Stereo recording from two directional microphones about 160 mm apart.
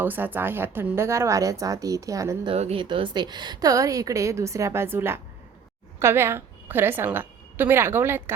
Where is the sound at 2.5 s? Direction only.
40° right (ahead or behind).